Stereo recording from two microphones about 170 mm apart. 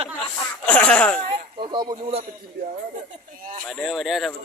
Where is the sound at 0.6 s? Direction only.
5° left (ahead or behind).